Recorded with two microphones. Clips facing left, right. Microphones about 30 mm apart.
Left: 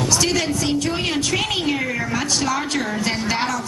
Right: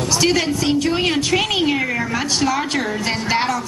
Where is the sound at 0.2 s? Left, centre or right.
Centre.